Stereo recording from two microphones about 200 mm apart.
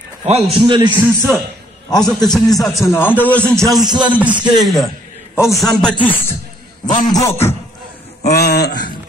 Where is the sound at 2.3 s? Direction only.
Centre (ahead or behind).